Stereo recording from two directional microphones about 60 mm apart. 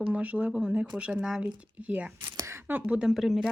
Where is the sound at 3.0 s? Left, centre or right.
Centre.